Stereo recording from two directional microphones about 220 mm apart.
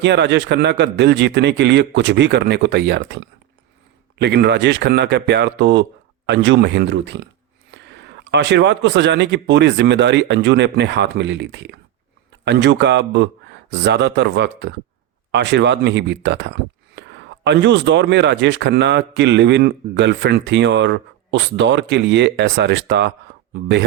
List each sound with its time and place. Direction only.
0.0 s speech: 50° right (ahead or behind)